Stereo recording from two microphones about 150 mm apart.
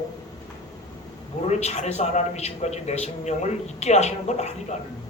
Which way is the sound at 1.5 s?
50° left (ahead or behind).